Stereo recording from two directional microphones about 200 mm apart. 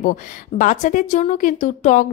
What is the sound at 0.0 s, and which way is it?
A woman's voice, 40° left (ahead or behind).